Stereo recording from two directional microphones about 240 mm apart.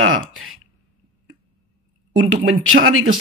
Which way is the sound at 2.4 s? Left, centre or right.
Right.